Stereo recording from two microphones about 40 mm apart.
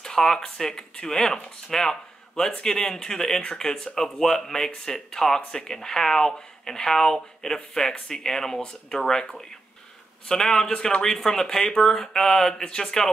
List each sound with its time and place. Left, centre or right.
0.0 s a man's voice: centre